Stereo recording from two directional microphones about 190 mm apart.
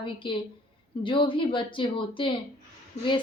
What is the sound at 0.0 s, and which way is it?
A woman's voice, 25° left (ahead or behind).